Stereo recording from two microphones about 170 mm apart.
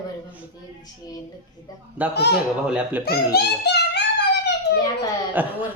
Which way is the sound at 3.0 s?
70° left (ahead or behind).